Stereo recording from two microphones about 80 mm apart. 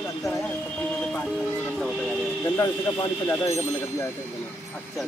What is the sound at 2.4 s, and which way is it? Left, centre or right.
Music, left.